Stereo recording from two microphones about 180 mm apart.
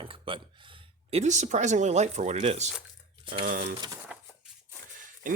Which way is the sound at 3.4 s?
50° right (ahead or behind).